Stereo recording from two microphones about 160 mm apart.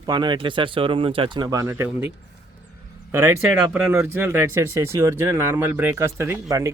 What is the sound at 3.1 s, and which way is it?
Speech, 15° right (ahead or behind).